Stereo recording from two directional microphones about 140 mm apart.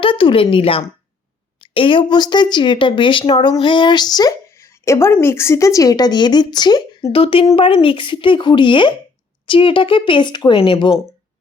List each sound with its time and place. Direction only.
0.0 s speech: 40° left (ahead or behind)
7.1 s speech: 40° left (ahead or behind)